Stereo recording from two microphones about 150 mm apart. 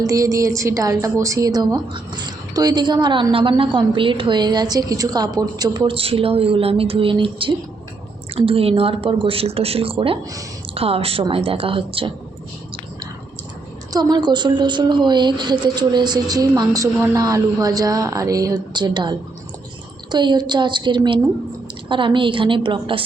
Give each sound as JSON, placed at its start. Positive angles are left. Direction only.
{"t": 0.0, "sound": "a woman's voice", "side_deg": -25}
{"t": 13.9, "sound": "a woman's voice", "side_deg": -25}